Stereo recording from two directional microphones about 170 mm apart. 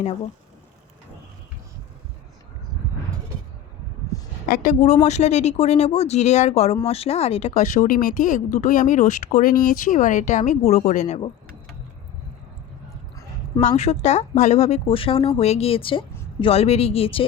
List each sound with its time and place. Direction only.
4.4 s speech: 55° left (ahead or behind)
13.6 s speech: 40° left (ahead or behind)